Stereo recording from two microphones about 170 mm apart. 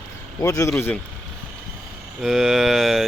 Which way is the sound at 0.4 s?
20° left (ahead or behind).